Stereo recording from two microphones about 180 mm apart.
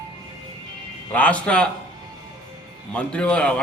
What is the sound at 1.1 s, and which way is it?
Speech, 5° left (ahead or behind).